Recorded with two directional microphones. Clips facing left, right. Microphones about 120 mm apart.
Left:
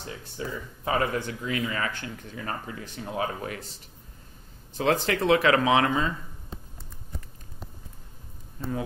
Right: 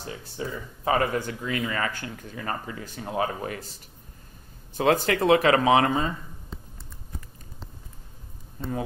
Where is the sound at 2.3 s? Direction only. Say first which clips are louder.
Right 2 dB; 50° right (ahead or behind).